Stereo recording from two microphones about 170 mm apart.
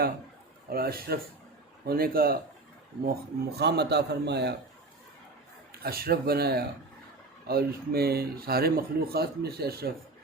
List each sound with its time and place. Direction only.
0.7 s speech: 65° right (ahead or behind)
3.6 s a man's voice: 75° right (ahead or behind)
5.8 s speech: 65° right (ahead or behind)